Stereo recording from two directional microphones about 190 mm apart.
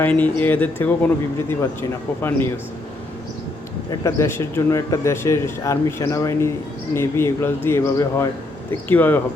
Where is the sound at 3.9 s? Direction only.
15° left (ahead or behind).